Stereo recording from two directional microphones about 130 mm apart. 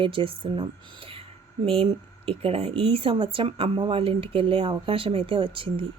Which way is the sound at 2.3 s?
50° right (ahead or behind).